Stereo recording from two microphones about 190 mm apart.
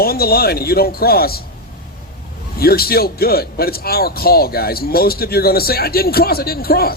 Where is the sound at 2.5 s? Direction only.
55° left (ahead or behind).